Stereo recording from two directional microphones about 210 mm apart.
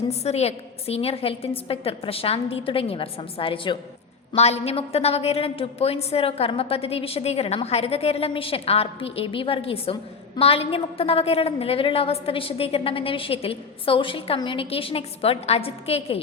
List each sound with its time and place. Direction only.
0.1 s a woman's voice: 30° left (ahead or behind)